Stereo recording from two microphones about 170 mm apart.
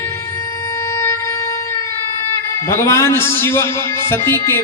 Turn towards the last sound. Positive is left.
turn(degrees=15)  # may be behind; listen again after turning